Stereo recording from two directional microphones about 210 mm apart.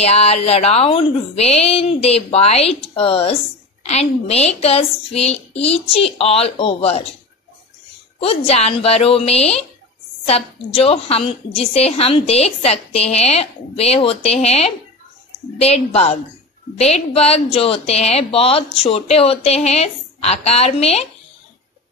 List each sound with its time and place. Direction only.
0.0 s a woman's voice: 30° left (ahead or behind)
8.2 s a woman's voice: 30° left (ahead or behind)